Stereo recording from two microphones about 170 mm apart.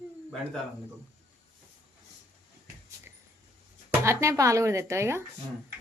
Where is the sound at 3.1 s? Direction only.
15° right (ahead or behind).